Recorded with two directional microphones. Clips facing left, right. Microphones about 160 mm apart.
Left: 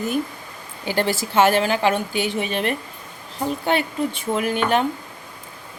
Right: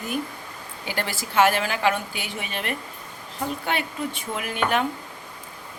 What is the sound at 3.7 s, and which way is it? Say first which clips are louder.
A woman's voice: left 6 dB; 30° left (ahead or behind).